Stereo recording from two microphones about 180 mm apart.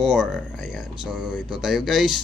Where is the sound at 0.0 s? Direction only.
Centre (ahead or behind).